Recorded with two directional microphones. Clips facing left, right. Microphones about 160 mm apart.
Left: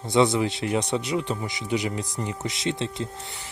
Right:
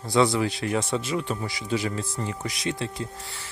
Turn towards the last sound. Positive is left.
turn(degrees=20)  # may be behind; listen again after turning